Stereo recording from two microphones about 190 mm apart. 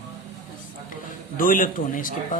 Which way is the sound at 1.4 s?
45° left (ahead or behind).